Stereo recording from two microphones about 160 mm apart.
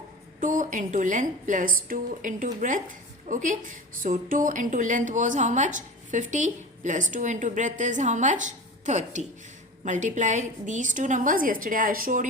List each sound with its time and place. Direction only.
0.3 s a woman's voice: 55° right (ahead or behind)